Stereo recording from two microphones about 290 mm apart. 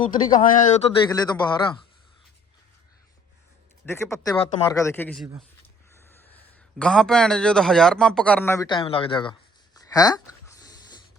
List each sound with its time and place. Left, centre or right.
0.3 s speech: left
1.0 s a man's voice: centre
3.8 s a man's voice: centre
9.7 s a sound: centre
10.6 s dog: centre